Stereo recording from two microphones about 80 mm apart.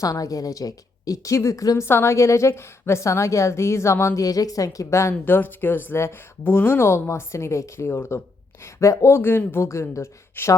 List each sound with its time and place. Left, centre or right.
0.0 s a woman's voice: left
5.2 s a woman's voice: left